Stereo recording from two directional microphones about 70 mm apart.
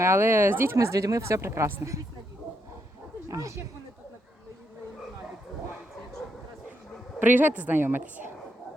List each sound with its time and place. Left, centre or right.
0.0 s speech: right
3.2 s speech: right
7.2 s a woman's voice: right